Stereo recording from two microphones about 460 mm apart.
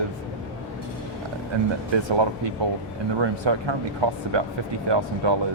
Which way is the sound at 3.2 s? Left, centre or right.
Right.